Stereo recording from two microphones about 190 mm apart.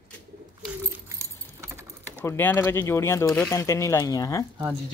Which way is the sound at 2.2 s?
10° left (ahead or behind).